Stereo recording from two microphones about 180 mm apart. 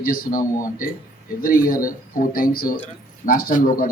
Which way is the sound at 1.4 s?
50° left (ahead or behind).